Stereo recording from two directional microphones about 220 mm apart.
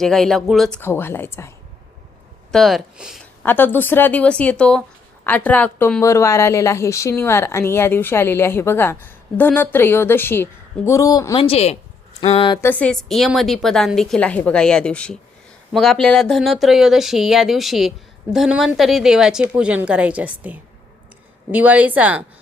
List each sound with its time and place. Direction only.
0.0 s a woman's voice: centre (ahead or behind)
2.5 s a woman's voice: centre (ahead or behind); by 11.4 s 15° left (ahead or behind)
11.4 s a woman's voice: 30° left (ahead or behind)
12.6 s a woman's voice: 5° left (ahead or behind)